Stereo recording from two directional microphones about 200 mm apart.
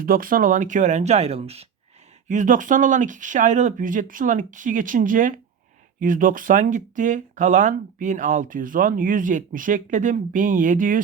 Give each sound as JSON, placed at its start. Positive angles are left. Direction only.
{"t": 0.0, "sound": "speech", "side_deg": -45}